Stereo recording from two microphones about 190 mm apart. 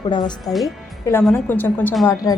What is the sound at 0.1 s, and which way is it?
Speech, 25° left (ahead or behind).